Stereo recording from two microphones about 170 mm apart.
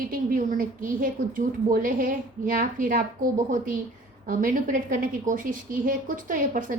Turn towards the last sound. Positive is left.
turn(degrees=-50)  # may be behind; listen again after turning